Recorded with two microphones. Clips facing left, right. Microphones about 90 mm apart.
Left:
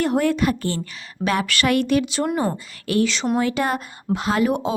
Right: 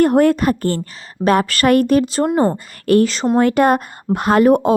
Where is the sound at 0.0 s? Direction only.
50° right (ahead or behind).